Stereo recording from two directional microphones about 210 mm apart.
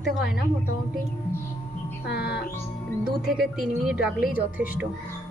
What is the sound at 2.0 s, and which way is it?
Speech, 50° left (ahead or behind).